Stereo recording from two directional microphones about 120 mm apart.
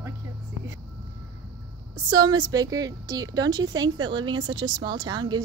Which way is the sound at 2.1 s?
35° right (ahead or behind).